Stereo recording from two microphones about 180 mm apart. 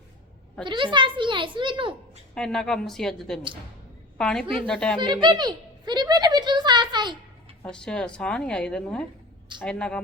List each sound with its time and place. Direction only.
0.6 s a child's voice: 25° right (ahead or behind)
2.3 s a woman's voice: 5° left (ahead or behind)
4.9 s a sound: 25° right (ahead or behind)
7.6 s a woman's voice: 5° left (ahead or behind)